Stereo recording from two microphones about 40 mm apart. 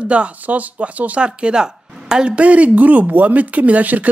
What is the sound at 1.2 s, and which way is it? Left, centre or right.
Speech, right.